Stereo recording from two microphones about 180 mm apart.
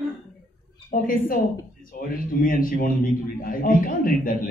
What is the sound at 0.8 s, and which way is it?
Speech, 50° left (ahead or behind).